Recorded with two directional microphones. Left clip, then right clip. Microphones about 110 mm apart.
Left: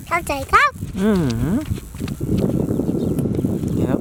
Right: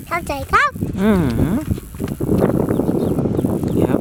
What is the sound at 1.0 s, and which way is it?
Speech, 30° right (ahead or behind).